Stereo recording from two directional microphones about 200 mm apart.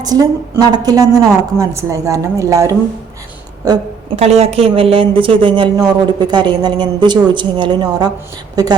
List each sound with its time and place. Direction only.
0.0 s a woman's voice: 20° right (ahead or behind)
4.1 s a woman's voice: 30° right (ahead or behind)